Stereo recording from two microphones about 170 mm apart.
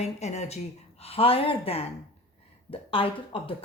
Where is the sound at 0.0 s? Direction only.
40° left (ahead or behind).